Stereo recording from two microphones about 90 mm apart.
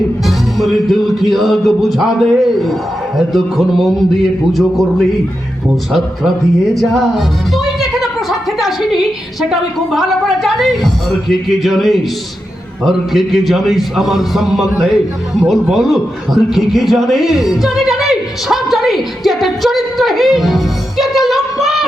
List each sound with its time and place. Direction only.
0.3 s music: centre (ahead or behind)
6.7 s music: centre (ahead or behind)
15.7 s a man's voice: centre (ahead or behind)
21.0 s a sound: centre (ahead or behind)